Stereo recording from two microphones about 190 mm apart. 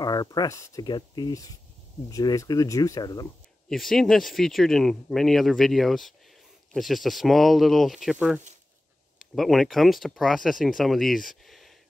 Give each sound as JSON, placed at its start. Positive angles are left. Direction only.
{"t": 0.0, "sound": "speech", "side_deg": 20}
{"t": 3.6, "sound": "speech", "side_deg": 0}